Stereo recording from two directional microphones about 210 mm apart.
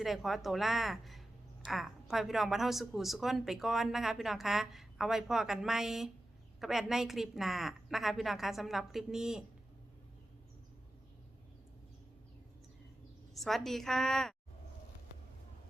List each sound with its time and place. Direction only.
0.0 s a woman's voice: centre (ahead or behind)
13.3 s a woman's voice: centre (ahead or behind)